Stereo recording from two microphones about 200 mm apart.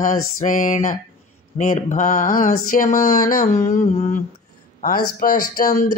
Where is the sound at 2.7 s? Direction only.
45° left (ahead or behind).